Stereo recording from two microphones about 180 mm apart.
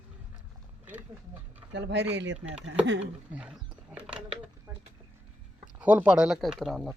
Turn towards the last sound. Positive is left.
turn(degrees=0)  # may be behind; listen again after turning